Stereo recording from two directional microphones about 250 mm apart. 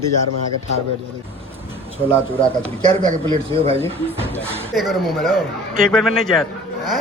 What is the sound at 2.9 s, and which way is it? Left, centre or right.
Speech, right.